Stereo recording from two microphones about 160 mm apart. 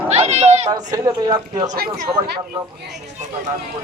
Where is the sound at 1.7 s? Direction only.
70° right (ahead or behind).